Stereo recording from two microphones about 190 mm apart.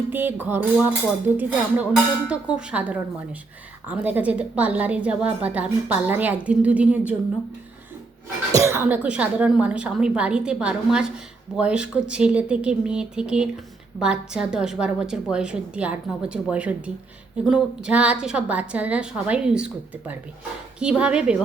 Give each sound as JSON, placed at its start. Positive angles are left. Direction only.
{"t": 0.1, "sound": "a woman's voice", "side_deg": -10}
{"t": 8.5, "sound": "a woman's voice", "side_deg": -15}